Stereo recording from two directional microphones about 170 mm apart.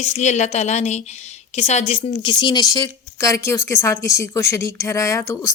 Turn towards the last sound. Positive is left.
turn(degrees=20)  # may be behind; listen again after turning